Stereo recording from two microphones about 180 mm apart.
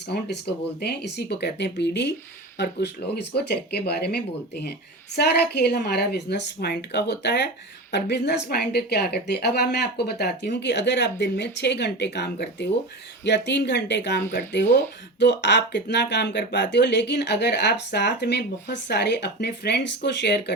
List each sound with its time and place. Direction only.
0.1 s speech: 65° left (ahead or behind)